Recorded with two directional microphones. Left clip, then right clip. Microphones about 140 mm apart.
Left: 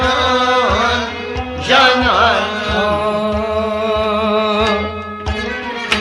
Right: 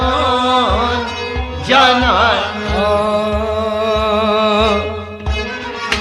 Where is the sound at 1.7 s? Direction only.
25° right (ahead or behind).